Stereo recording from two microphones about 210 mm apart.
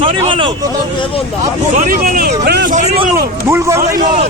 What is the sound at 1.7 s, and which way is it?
Speech, 40° right (ahead or behind).